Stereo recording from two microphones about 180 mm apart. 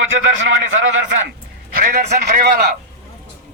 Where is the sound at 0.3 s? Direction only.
90° right.